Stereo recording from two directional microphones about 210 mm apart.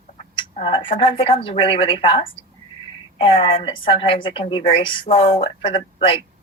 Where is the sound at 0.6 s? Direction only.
25° left (ahead or behind).